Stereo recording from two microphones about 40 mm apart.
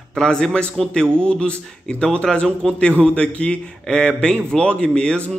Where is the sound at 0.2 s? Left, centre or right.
Centre.